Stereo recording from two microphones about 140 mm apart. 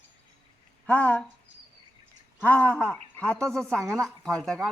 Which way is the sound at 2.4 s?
10° left (ahead or behind).